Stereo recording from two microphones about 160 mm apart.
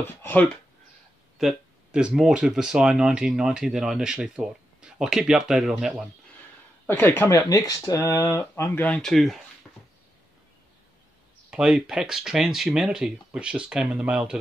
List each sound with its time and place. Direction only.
0.0 s speech: 10° left (ahead or behind)
1.4 s speech: 5° right (ahead or behind)
6.9 s speech: 15° left (ahead or behind)
8.8 s speech: 5° left (ahead or behind)
11.5 s speech: 5° right (ahead or behind)